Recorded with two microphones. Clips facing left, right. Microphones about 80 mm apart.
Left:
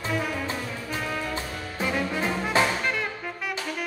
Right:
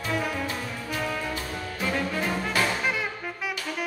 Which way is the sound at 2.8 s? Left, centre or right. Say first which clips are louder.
Even; centre.